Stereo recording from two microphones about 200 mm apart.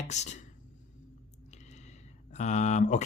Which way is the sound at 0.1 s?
35° left (ahead or behind).